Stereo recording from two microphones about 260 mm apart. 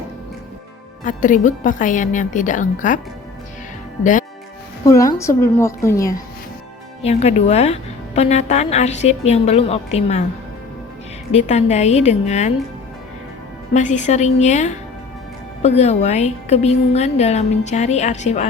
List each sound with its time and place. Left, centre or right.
1.0 s a woman's voice: left
4.9 s a woman's voice: centre
7.0 s a woman's voice: left
11.3 s a woman's voice: left
13.7 s a woman's voice: left